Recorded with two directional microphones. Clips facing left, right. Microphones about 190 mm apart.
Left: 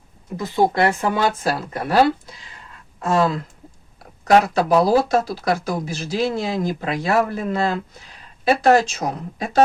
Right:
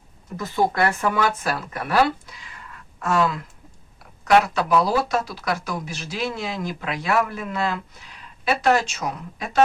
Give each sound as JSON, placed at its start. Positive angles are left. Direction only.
{"t": 0.3, "sound": "speech", "side_deg": 15}